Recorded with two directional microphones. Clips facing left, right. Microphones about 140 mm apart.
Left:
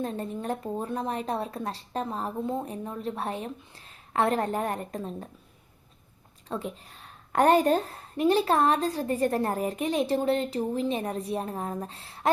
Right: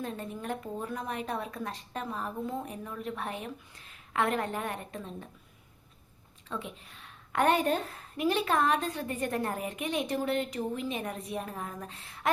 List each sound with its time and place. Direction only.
0.0 s a woman's voice: 35° left (ahead or behind)
6.5 s a woman's voice: 35° left (ahead or behind)